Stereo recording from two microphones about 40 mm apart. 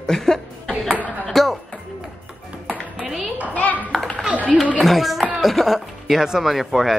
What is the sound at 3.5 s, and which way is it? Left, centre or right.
Clapping, left.